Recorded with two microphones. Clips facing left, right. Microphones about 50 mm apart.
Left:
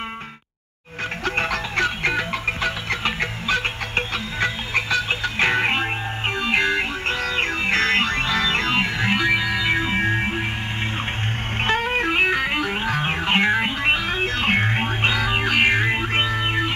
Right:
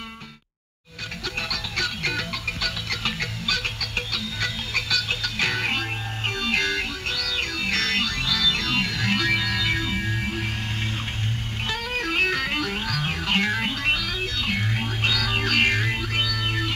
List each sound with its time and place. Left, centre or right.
1.2 s music: left
11.6 s music: left